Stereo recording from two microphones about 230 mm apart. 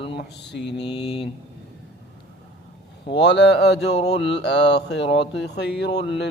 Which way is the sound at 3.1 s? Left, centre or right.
Left.